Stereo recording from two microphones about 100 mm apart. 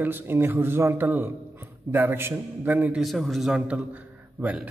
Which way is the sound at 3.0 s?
Centre (ahead or behind).